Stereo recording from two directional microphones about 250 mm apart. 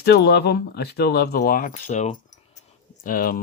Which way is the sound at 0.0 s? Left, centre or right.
Left.